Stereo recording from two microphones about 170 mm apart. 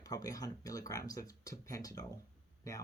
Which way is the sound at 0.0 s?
20° left (ahead or behind).